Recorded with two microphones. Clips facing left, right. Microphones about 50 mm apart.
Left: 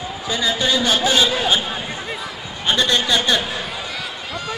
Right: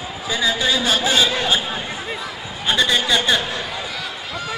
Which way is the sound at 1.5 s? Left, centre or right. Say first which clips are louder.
Even; centre.